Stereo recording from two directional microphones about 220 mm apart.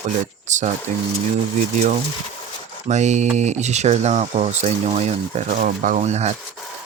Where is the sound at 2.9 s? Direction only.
30° right (ahead or behind).